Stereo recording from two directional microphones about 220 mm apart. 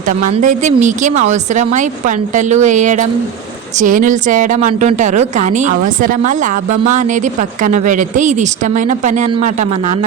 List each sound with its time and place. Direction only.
0.3 s a woman's voice: 35° right (ahead or behind)